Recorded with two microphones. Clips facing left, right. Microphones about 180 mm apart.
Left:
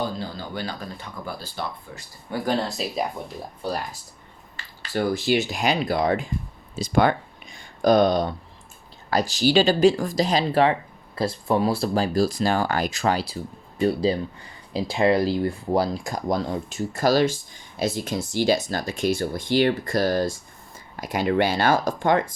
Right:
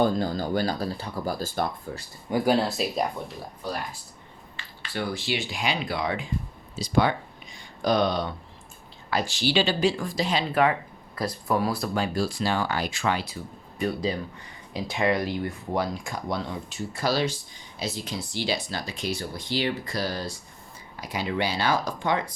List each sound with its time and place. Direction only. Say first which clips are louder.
0.0 s speech: right 6 dB; 45° right (ahead or behind)
2.3 s speech: right 2 dB; 10° right (ahead or behind)
3.6 s speech: left 4 dB; 30° left (ahead or behind)
4.5 s speech: left 6 dB; 40° left (ahead or behind)
6.7 s a sound: left 3 dB; 50° left (ahead or behind)
9.0 s speech: left 5 dB; 40° left (ahead or behind)